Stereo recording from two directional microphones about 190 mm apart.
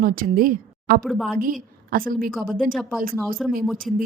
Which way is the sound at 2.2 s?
50° right (ahead or behind).